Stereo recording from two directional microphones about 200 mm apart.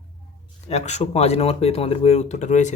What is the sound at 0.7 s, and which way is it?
Speech, 35° left (ahead or behind).